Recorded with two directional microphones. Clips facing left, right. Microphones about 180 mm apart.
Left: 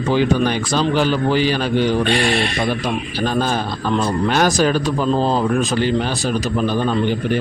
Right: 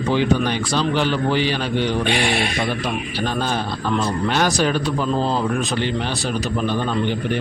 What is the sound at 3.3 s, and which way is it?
A man's voice, 40° left (ahead or behind).